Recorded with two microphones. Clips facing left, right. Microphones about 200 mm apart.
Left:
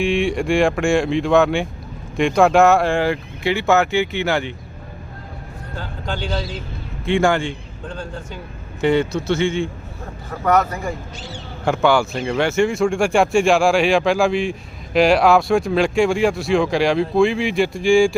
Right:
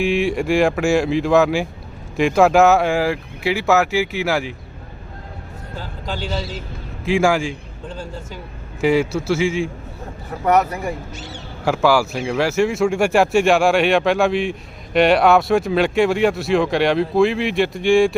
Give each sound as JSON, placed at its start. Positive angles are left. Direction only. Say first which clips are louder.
{"t": 0.0, "sound": "speech", "louder": "even", "side_deg": -5}
{"t": 5.7, "sound": "a man's voice", "louder": "left 1 dB", "side_deg": -5}
{"t": 10.4, "sound": "speech", "louder": "right 1 dB", "side_deg": -15}
{"t": 11.6, "sound": "speech", "louder": "even", "side_deg": -5}